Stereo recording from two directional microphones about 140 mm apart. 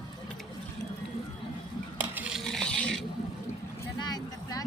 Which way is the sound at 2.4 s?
Centre (ahead or behind).